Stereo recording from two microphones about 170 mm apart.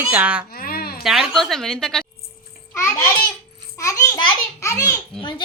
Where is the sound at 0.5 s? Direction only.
60° left (ahead or behind).